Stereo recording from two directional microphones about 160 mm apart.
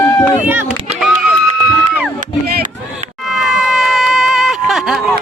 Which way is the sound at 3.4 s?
Centre (ahead or behind).